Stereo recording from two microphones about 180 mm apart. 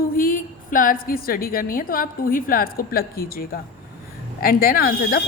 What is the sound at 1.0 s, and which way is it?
A woman's voice, 55° left (ahead or behind).